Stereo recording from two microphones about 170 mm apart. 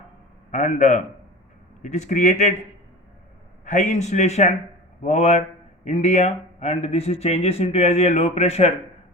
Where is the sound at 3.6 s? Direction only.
45° left (ahead or behind).